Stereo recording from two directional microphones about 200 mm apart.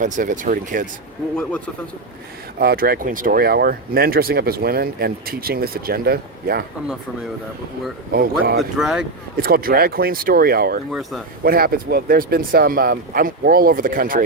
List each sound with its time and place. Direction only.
0.0 s speech: 40° right (ahead or behind)
2.6 s speech: 50° right (ahead or behind)
8.1 s speech: 50° right (ahead or behind)
8.8 s speech: 5° right (ahead or behind)
9.4 s speech: 50° right (ahead or behind)